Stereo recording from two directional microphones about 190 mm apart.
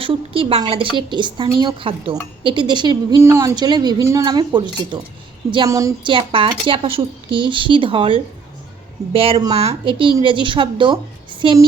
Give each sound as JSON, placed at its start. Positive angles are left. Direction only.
{"t": 0.0, "sound": "a woman's voice", "side_deg": -30}